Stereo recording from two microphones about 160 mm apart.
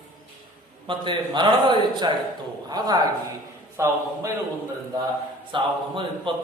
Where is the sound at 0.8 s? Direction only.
30° right (ahead or behind).